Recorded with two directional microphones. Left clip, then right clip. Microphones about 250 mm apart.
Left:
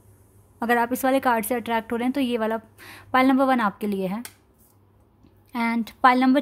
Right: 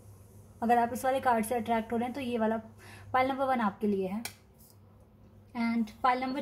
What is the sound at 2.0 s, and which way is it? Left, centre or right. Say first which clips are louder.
Speech: left 7 dB; left.